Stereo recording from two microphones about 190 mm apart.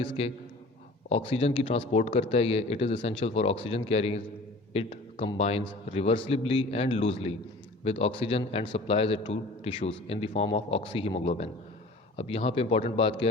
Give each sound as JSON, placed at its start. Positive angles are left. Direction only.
{"t": 0.2, "sound": "a man's voice", "side_deg": 30}